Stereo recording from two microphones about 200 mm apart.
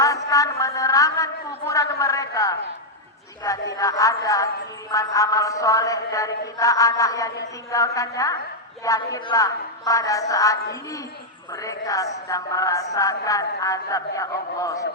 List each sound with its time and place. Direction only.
0.3 s a man's voice: 15° left (ahead or behind)